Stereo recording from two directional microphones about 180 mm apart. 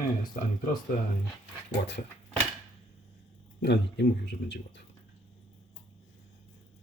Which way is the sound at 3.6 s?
70° left (ahead or behind).